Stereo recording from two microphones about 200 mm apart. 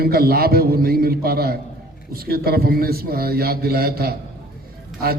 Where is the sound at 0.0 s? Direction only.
50° right (ahead or behind).